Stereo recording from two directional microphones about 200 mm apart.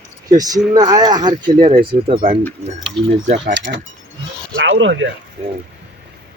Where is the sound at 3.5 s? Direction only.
60° right (ahead or behind).